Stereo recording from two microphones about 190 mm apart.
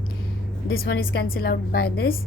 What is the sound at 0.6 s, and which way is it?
A woman's voice, 55° left (ahead or behind).